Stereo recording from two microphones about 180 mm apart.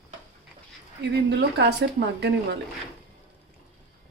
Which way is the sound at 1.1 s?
70° right (ahead or behind).